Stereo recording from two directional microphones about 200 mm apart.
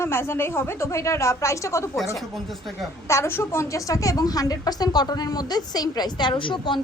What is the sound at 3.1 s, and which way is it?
A woman's voice, 15° left (ahead or behind).